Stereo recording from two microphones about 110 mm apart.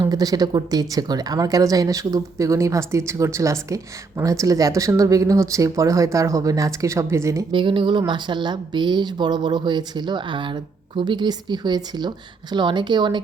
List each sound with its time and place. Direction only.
0.0 s a woman's voice: 35° right (ahead or behind)
7.5 s speech: 50° right (ahead or behind)